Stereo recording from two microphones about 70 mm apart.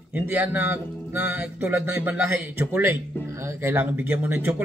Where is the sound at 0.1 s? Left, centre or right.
Right.